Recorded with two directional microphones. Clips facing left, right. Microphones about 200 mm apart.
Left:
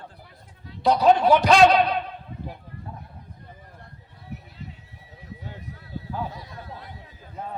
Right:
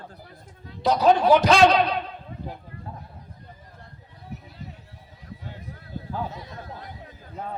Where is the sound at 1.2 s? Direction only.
20° right (ahead or behind).